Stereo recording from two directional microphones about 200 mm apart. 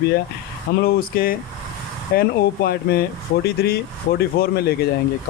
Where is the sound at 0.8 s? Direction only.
50° left (ahead or behind).